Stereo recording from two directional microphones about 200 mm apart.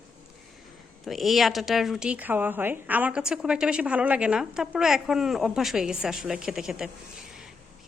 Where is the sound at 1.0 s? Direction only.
Centre (ahead or behind).